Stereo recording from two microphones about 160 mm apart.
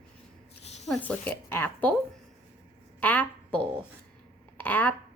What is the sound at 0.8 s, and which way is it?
Speech, 5° left (ahead or behind).